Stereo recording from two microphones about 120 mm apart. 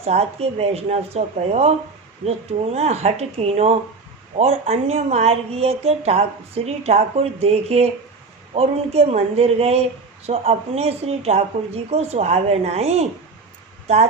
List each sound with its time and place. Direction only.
0.0 s speech: 60° right (ahead or behind)